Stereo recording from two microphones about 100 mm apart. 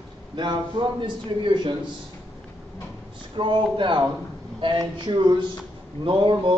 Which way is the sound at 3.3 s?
55° right (ahead or behind).